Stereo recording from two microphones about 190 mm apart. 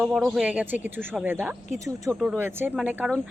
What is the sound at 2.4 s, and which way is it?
Speech, 10° right (ahead or behind).